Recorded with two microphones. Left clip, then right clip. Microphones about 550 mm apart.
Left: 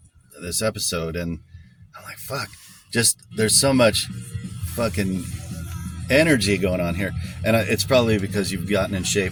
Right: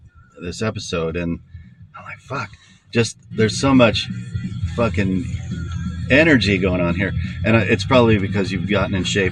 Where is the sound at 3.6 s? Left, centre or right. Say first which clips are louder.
Right 3 dB; left.